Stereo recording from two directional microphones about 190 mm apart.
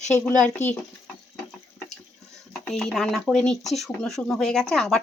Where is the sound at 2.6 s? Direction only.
Centre (ahead or behind).